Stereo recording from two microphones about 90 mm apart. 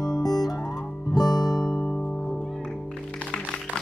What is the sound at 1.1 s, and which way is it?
Guitar, 50° left (ahead or behind).